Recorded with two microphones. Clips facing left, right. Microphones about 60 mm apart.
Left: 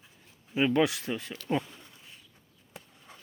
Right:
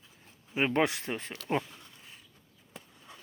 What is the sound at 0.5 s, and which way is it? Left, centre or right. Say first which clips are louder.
Speech: left 2 dB; right.